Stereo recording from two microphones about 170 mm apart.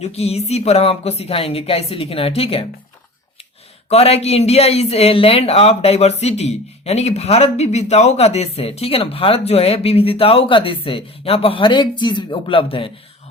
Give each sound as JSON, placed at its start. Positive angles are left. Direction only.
{"t": 0.0, "sound": "speech", "side_deg": 35}
{"t": 3.8, "sound": "speech", "side_deg": 35}